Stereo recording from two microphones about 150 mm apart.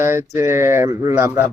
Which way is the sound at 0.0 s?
15° right (ahead or behind).